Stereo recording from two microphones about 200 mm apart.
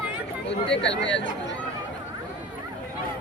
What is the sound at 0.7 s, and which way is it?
Speech, 65° left (ahead or behind).